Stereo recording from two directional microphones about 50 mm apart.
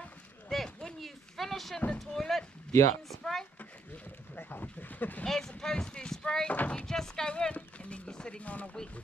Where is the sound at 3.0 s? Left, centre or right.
Centre.